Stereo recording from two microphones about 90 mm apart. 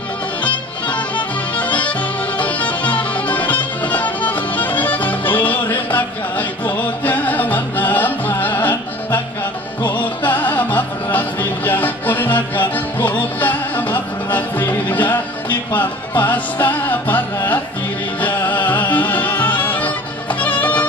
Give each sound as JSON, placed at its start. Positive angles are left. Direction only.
{"t": 0.4, "sound": "music", "side_deg": 15}